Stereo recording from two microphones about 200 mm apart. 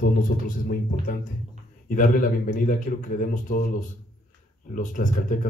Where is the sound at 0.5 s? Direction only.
45° left (ahead or behind).